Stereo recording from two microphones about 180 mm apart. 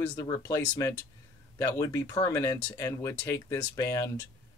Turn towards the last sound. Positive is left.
turn(degrees=15)  # may be behind; listen again after turning